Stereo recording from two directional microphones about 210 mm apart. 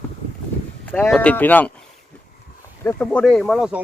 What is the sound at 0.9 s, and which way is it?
Speech, 5° left (ahead or behind).